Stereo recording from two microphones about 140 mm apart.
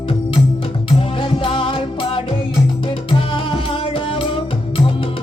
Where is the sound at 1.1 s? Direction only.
40° left (ahead or behind).